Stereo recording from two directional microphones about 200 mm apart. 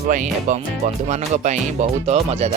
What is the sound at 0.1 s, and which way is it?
Speech, 40° right (ahead or behind).